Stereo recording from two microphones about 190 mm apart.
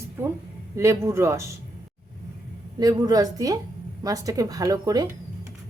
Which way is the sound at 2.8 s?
20° right (ahead or behind).